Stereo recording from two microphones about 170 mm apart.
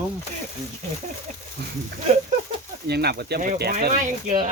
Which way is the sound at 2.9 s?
75° right (ahead or behind).